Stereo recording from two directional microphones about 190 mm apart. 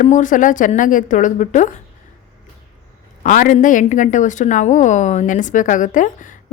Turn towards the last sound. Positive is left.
turn(degrees=40)  # may be behind; listen again after turning